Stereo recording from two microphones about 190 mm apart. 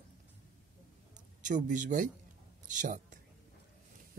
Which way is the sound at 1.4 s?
40° right (ahead or behind).